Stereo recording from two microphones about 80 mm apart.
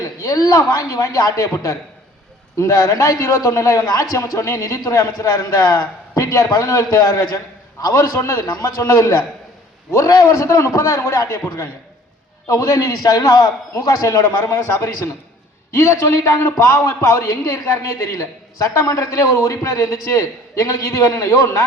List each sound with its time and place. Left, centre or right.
0.0 s a man's voice: left